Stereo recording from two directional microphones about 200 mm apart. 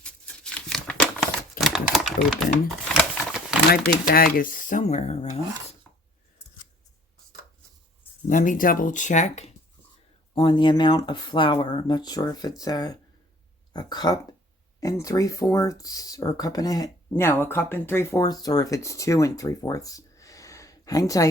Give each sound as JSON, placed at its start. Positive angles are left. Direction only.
{"t": 0.5, "sound": "typewriter", "side_deg": 5}
{"t": 2.9, "sound": "a sound", "side_deg": 0}
{"t": 3.7, "sound": "speech", "side_deg": 45}
{"t": 8.3, "sound": "speech", "side_deg": 40}
{"t": 10.3, "sound": "speech", "side_deg": 25}